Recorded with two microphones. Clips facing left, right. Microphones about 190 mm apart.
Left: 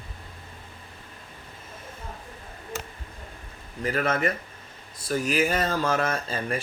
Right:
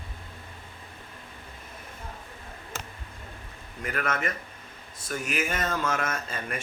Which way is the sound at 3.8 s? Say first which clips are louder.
Left 5 dB; 30° left (ahead or behind).